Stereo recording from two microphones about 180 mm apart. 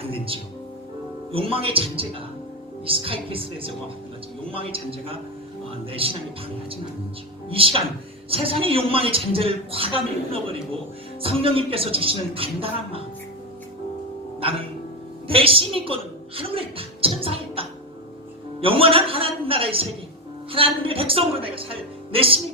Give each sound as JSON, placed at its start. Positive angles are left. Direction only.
{"t": 0.0, "sound": "music", "side_deg": -30}
{"t": 1.3, "sound": "speech", "side_deg": -30}
{"t": 7.6, "sound": "speech", "side_deg": -30}
{"t": 11.2, "sound": "speech", "side_deg": -30}
{"t": 15.3, "sound": "a woman's voice", "side_deg": -30}